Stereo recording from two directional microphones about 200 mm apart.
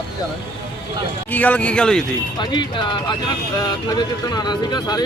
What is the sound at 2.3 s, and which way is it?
Speech, 20° left (ahead or behind).